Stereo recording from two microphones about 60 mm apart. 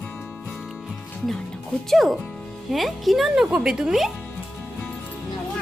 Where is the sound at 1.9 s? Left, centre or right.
Centre.